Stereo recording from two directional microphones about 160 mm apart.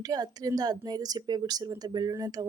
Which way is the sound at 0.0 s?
25° right (ahead or behind).